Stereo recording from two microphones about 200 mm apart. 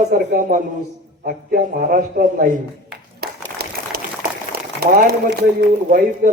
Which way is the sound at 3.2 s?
50° right (ahead or behind).